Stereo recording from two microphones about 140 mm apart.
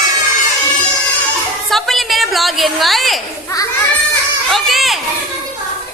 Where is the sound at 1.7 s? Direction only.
Centre (ahead or behind).